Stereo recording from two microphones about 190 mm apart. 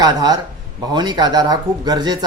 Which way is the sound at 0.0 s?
20° right (ahead or behind).